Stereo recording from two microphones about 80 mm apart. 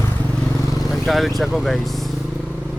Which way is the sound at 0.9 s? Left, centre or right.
Centre.